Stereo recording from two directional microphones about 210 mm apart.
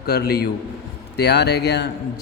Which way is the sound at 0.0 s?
45° left (ahead or behind).